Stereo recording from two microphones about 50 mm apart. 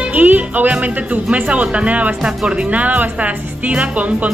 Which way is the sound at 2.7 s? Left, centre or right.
Right.